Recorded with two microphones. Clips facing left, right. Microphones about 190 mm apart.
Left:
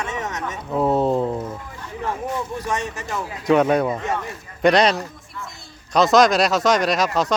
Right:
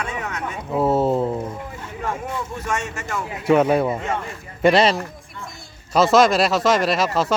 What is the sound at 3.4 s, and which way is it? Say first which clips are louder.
Speech: even; 5° right (ahead or behind).